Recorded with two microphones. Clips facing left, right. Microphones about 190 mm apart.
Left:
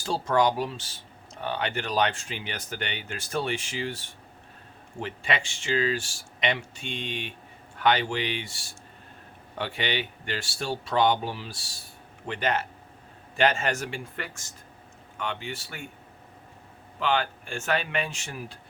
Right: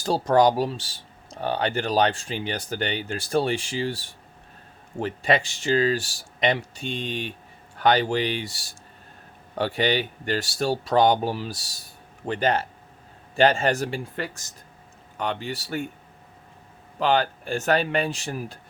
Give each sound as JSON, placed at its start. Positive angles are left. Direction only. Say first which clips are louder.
{"t": 0.0, "sound": "speech", "louder": "right 5 dB", "side_deg": -40}
{"t": 17.0, "sound": "speech", "louder": "right 5 dB", "side_deg": -40}